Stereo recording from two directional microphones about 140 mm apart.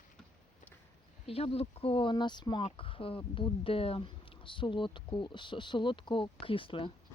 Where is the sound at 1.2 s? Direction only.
45° left (ahead or behind).